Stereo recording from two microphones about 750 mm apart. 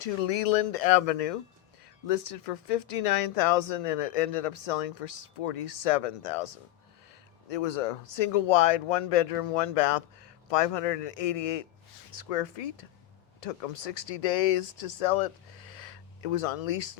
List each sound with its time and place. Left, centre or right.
0.0 s speech: left